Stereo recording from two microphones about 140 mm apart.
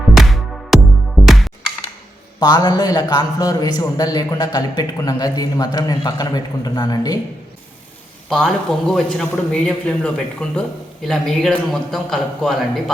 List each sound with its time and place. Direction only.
0.1 s music: centre (ahead or behind)
2.4 s a man's voice: 30° left (ahead or behind)
8.3 s a man's voice: 5° left (ahead or behind)